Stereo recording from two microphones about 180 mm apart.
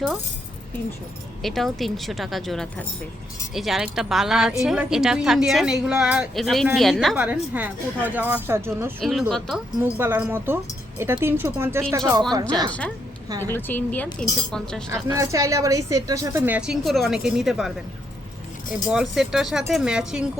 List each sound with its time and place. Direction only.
1.4 s a woman's voice: centre (ahead or behind)
9.0 s a woman's voice: centre (ahead or behind)
9.8 s a woman's voice: 10° right (ahead or behind)
13.4 s speech: 10° left (ahead or behind)
15.0 s a woman's voice: 15° right (ahead or behind)
18.9 s a woman's voice: 5° right (ahead or behind)